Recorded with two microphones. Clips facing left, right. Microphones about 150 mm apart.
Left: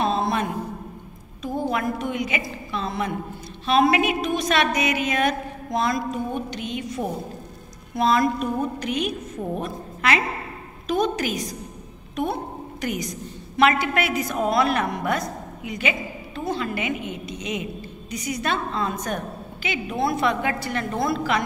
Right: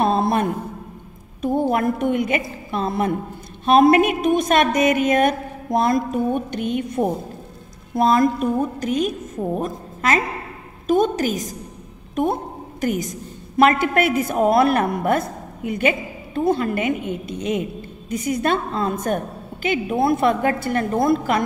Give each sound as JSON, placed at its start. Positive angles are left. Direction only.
{"t": 0.0, "sound": "a sound", "side_deg": -55}
{"t": 1.4, "sound": "a woman's voice", "side_deg": -50}
{"t": 12.8, "sound": "a woman's voice", "side_deg": -45}